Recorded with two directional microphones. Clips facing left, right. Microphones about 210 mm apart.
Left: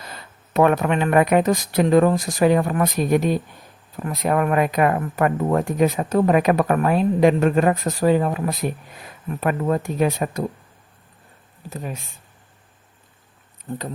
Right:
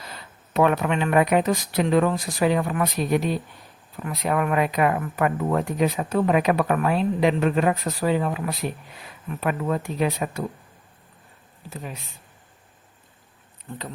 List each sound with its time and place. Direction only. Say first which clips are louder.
0.0 s speech: left 2 dB; 50° left (ahead or behind)
11.7 s speech: left 4 dB; 45° left (ahead or behind)
13.7 s speech: left 7 dB; 35° left (ahead or behind)